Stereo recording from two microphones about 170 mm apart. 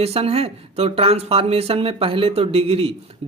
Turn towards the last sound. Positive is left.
turn(degrees=-35)  # may be behind; listen again after turning